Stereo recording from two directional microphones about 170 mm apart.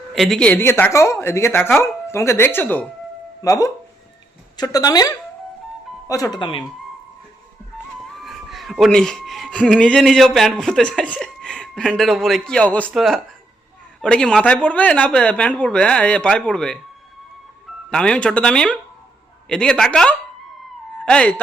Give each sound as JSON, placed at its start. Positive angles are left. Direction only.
{"t": 0.1, "sound": "a woman's voice", "side_deg": 0}
{"t": 8.2, "sound": "a woman's voice", "side_deg": 0}
{"t": 17.9, "sound": "speech", "side_deg": 5}